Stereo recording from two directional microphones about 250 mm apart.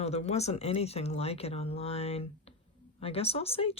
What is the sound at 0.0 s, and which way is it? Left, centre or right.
Speech, left.